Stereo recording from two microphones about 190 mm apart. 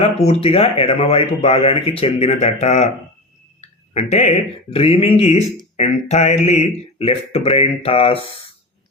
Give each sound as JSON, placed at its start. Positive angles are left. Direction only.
{"t": 0.0, "sound": "speech", "side_deg": 30}
{"t": 4.1, "sound": "speech", "side_deg": 35}